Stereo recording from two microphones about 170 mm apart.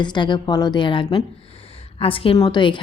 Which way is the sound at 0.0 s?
25° left (ahead or behind).